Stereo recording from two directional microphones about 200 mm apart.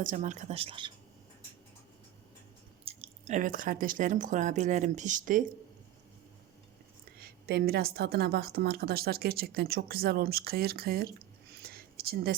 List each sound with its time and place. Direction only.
0.0 s speech: 40° right (ahead or behind); by 0.9 s 25° right (ahead or behind)
2.8 s speech: 35° right (ahead or behind)
7.2 s a woman's voice: 50° right (ahead or behind)
11.6 s a sound: 50° right (ahead or behind)